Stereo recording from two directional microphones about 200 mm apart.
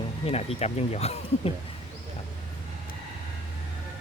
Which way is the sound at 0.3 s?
30° left (ahead or behind).